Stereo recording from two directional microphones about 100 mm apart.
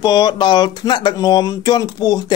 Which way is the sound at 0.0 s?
45° left (ahead or behind).